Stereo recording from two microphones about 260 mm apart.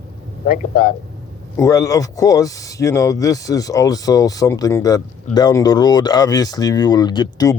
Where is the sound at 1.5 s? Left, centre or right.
Centre.